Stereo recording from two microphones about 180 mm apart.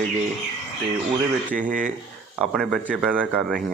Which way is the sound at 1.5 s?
45° right (ahead or behind).